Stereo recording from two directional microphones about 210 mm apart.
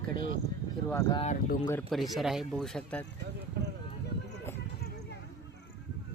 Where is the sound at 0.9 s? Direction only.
15° left (ahead or behind).